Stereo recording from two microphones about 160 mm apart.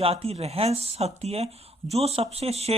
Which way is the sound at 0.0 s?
40° right (ahead or behind).